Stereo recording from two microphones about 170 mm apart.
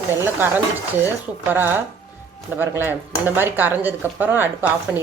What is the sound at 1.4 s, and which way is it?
Speech, 10° right (ahead or behind).